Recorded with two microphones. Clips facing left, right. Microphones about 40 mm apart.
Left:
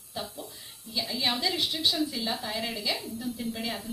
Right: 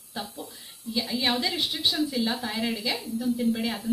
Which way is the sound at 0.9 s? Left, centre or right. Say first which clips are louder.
Right 3 dB; centre.